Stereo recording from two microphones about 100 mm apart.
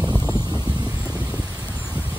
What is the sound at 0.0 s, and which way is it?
Vehicle, 10° right (ahead or behind).